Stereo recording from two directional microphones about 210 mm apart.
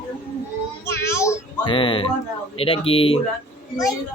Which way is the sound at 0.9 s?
10° left (ahead or behind).